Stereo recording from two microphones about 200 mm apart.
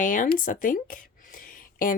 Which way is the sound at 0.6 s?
40° left (ahead or behind).